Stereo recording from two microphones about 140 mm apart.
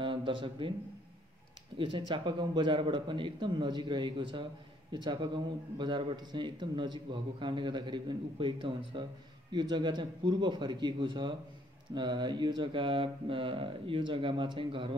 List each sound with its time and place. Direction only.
0.0 s a man's voice: 35° right (ahead or behind)
1.8 s a man's voice: 35° right (ahead or behind)